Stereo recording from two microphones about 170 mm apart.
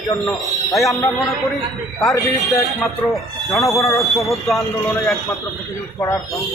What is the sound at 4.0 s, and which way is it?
Speech, centre (ahead or behind).